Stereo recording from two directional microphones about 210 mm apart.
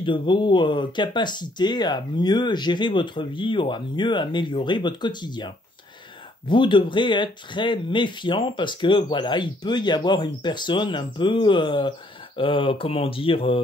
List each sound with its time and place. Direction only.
0.0 s speech: 25° left (ahead or behind)